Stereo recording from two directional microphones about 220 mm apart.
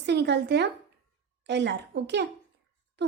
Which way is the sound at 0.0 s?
50° right (ahead or behind).